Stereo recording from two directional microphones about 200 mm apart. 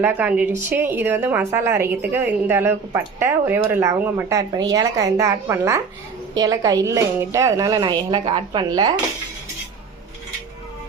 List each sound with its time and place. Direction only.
0.0 s a woman's voice: 10° right (ahead or behind)